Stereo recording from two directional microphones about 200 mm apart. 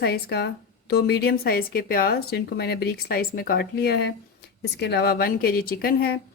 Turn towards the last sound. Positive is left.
turn(degrees=50)  # may be behind; listen again after turning